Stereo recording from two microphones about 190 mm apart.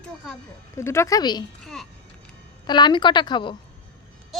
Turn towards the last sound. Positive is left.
turn(degrees=25)  # may be behind; listen again after turning